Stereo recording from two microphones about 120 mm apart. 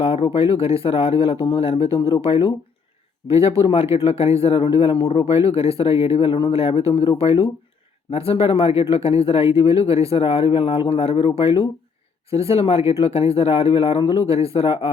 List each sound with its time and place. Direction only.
0.0 s speech: 50° left (ahead or behind)